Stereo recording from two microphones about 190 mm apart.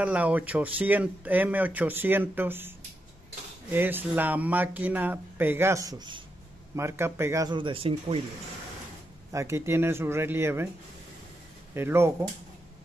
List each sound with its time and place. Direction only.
0.0 s speech: 5° right (ahead or behind)
3.7 s speech: 10° right (ahead or behind); by 8.2 s 30° right (ahead or behind)
9.3 s speech: 15° right (ahead or behind)
11.7 s speech: 15° right (ahead or behind)